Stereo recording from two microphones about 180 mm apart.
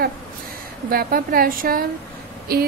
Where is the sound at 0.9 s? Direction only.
55° right (ahead or behind).